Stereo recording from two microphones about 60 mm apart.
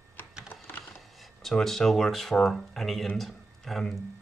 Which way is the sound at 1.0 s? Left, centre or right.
Centre.